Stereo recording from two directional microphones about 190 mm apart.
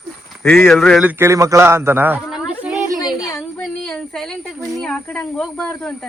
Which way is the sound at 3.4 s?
5° left (ahead or behind).